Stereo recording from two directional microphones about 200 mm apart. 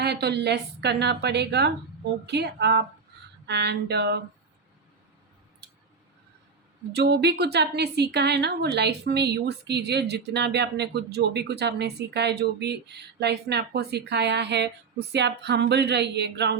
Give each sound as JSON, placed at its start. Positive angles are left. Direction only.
{"t": 0.0, "sound": "a woman's voice", "side_deg": -55}
{"t": 6.9, "sound": "a woman's voice", "side_deg": -55}